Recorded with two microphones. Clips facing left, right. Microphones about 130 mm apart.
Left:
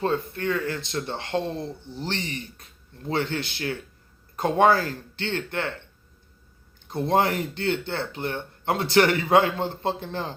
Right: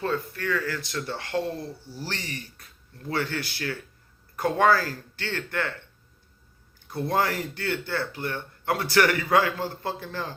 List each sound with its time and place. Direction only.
0.0 s speech: 25° left (ahead or behind)